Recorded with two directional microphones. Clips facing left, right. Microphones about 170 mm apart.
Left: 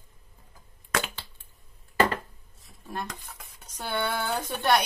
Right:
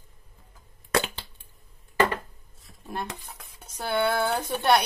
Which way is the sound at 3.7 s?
10° right (ahead or behind).